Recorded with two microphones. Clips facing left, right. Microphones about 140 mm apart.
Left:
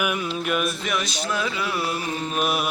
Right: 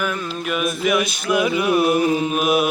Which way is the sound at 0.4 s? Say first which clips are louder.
Right 8 dB; centre (ahead or behind).